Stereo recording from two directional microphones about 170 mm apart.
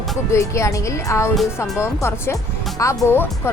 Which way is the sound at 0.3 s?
15° left (ahead or behind).